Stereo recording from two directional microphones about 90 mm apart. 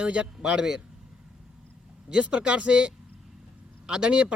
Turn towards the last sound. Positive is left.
turn(degrees=-10)  # may be behind; listen again after turning